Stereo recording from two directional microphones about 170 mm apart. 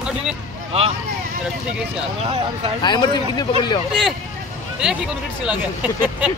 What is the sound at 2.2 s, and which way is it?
Speech, 40° right (ahead or behind).